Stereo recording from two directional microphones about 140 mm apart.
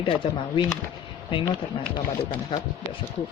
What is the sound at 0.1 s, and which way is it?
Speech, 35° left (ahead or behind).